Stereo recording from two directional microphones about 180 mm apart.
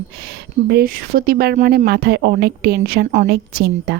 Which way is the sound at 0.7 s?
60° right (ahead or behind).